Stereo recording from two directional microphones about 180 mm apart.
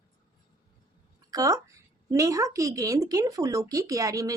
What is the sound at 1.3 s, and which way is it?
A woman's voice, 20° right (ahead or behind).